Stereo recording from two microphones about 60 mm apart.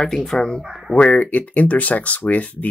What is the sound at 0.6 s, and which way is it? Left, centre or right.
Speech, centre.